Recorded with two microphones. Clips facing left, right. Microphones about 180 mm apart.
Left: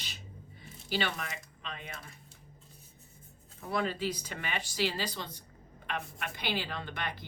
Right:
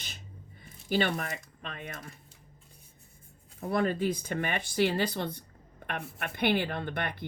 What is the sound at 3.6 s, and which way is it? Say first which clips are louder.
A woman's voice: right 5 dB; 50° right (ahead or behind).